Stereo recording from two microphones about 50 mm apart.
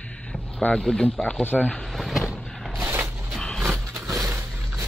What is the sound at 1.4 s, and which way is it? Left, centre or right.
Speech, left.